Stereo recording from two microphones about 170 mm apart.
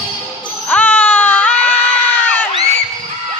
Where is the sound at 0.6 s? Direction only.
10° left (ahead or behind).